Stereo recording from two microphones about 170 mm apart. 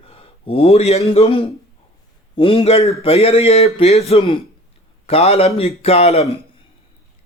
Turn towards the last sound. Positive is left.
turn(degrees=40)  # may be behind; listen again after turning